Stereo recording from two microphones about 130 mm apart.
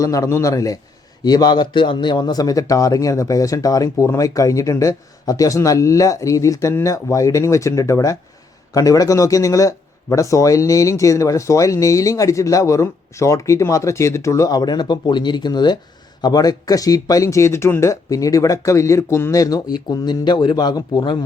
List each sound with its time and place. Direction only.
0.0 s speech: 25° left (ahead or behind)